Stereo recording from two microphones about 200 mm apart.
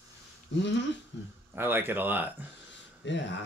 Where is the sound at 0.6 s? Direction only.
65° left (ahead or behind).